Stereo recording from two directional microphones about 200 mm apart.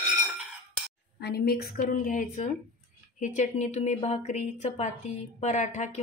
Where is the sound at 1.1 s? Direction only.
55° left (ahead or behind).